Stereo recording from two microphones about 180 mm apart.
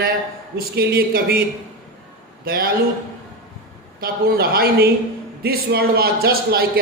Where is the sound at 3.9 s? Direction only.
55° right (ahead or behind).